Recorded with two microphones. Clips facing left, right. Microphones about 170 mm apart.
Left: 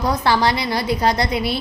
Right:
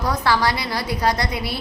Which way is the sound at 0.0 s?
25° left (ahead or behind).